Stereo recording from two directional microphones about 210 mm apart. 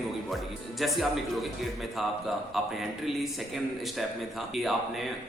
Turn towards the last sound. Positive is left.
turn(degrees=0)  # may be behind; listen again after turning